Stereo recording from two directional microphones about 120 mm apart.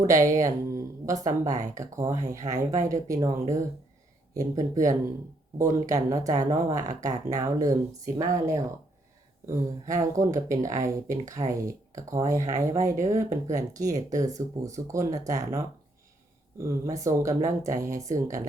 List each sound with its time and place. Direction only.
0.3 s speech: 25° right (ahead or behind)